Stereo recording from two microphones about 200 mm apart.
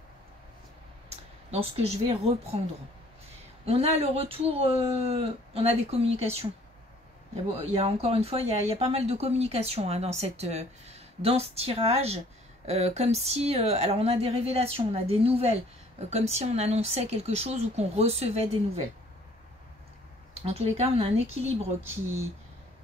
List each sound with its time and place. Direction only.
1.1 s speech: 30° right (ahead or behind)
3.6 s speech: 30° right (ahead or behind)
7.5 s speech: 30° right (ahead or behind)
20.4 s speech: 30° right (ahead or behind)